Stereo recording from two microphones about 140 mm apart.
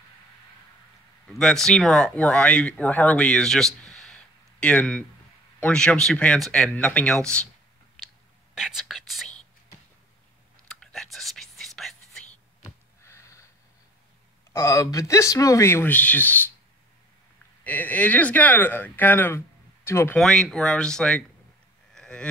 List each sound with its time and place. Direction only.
1.3 s speech: 5° left (ahead or behind)
8.5 s whispering: centre (ahead or behind)
10.7 s whispering: 5° left (ahead or behind)
12.6 s sniff: 20° left (ahead or behind)
14.5 s speech: 20° left (ahead or behind)
17.6 s speech: 10° left (ahead or behind)
20.2 s speech: 5° left (ahead or behind)
21.9 s a sound: 5° left (ahead or behind)